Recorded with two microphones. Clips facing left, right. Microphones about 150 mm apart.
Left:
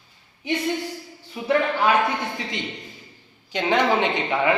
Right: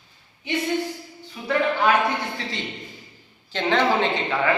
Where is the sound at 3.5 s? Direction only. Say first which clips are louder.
Left 1 dB; 15° left (ahead or behind).